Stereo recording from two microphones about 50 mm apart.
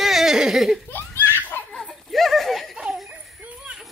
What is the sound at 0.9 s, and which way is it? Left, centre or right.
Belly laugh, left.